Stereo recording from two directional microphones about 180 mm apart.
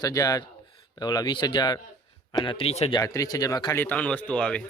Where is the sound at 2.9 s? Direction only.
20° left (ahead or behind).